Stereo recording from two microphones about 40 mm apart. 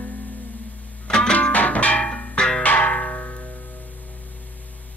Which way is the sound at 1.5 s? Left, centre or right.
Left.